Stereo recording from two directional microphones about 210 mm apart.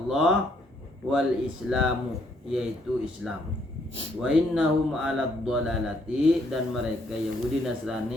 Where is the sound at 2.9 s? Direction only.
5° right (ahead or behind).